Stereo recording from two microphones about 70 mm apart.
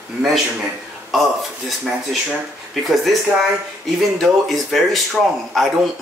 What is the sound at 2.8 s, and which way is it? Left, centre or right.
Speech, centre.